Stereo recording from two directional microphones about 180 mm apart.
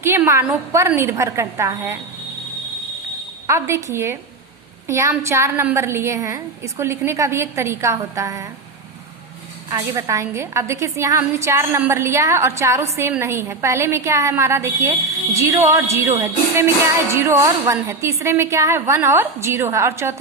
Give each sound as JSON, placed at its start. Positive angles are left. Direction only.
{"t": 0.0, "sound": "a woman's voice", "side_deg": -15}
{"t": 3.4, "sound": "a woman's voice", "side_deg": -15}
{"t": 9.6, "sound": "a woman's voice", "side_deg": -20}